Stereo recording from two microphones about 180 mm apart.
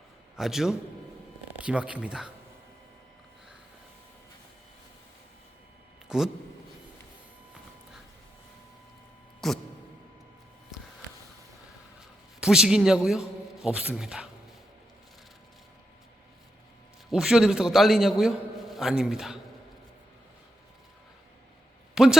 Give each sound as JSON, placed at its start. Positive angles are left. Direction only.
{"t": 0.3, "sound": "a man's voice", "side_deg": 0}
{"t": 6.1, "sound": "a man's voice", "side_deg": -5}
{"t": 9.4, "sound": "a man's voice", "side_deg": 0}
{"t": 12.4, "sound": "a man's voice", "side_deg": -5}
{"t": 17.1, "sound": "a man's voice", "side_deg": 0}
{"t": 21.9, "sound": "speech", "side_deg": -5}